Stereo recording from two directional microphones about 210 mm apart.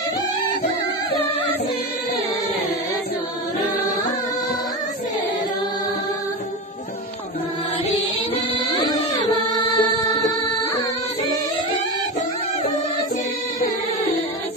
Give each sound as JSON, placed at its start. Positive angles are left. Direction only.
{"t": 8.7, "sound": "music", "side_deg": 20}